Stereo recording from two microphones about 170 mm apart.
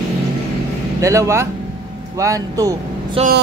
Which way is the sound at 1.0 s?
20° right (ahead or behind).